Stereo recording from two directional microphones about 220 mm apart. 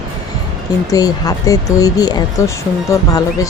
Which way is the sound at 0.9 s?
15° left (ahead or behind).